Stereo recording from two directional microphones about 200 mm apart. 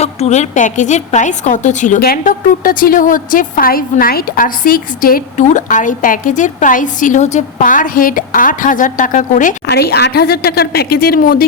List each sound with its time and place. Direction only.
0.0 s a woman's voice: 35° left (ahead or behind)
9.6 s speech: 55° left (ahead or behind)